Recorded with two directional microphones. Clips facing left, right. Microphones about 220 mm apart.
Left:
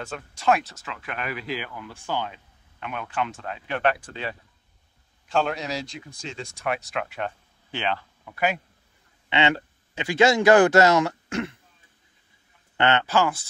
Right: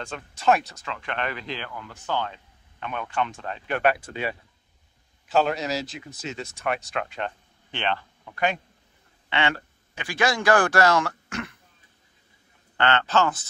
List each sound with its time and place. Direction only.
0.0 s speech: centre (ahead or behind)
3.8 s a man's voice: 10° right (ahead or behind); by 8.5 s 5° left (ahead or behind)
9.3 s speech: 20° left (ahead or behind)
12.7 s speech: 20° left (ahead or behind)